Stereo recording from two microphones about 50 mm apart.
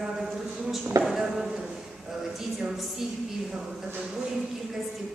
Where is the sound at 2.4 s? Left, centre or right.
Centre.